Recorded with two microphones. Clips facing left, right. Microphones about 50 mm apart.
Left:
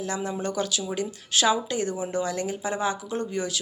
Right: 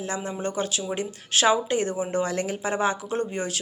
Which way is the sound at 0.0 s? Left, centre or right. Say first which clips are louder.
Even; right.